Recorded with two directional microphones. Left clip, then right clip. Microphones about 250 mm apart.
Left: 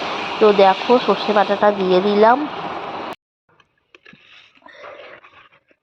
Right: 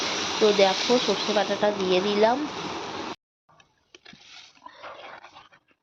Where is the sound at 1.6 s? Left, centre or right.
Centre.